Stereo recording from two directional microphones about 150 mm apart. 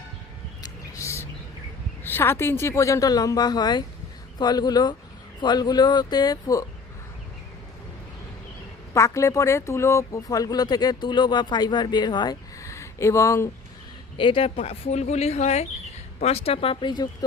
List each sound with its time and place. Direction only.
0.6 s a sound: 20° left (ahead or behind)
2.0 s speech: 15° left (ahead or behind)
8.9 s speech: 20° left (ahead or behind)
14.2 s speech: 35° left (ahead or behind)